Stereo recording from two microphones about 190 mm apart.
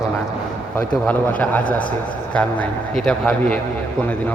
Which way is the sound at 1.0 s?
10° left (ahead or behind).